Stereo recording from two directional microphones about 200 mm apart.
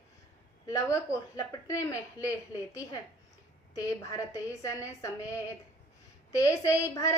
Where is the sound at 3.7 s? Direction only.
15° left (ahead or behind).